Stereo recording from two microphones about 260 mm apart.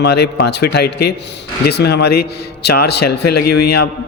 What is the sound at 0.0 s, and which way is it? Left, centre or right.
A man's voice, left.